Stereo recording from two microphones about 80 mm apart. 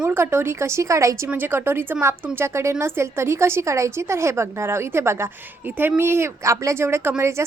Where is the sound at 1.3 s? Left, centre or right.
Right.